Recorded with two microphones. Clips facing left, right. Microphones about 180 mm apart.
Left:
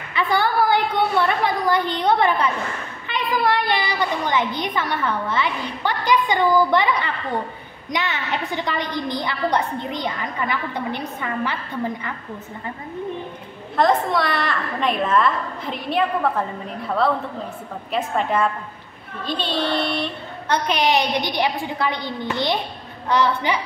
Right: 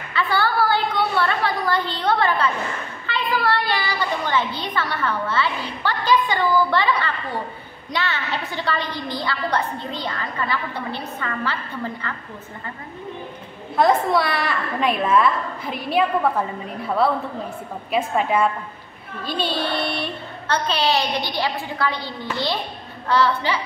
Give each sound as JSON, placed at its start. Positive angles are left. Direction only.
{"t": 0.1, "sound": "a woman's voice", "side_deg": 20}
{"t": 13.7, "sound": "a woman's voice", "side_deg": -5}
{"t": 17.9, "sound": "a woman's voice", "side_deg": -5}
{"t": 20.4, "sound": "a woman's voice", "side_deg": 15}